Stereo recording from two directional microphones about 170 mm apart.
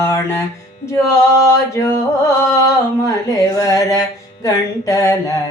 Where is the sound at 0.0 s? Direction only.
15° left (ahead or behind).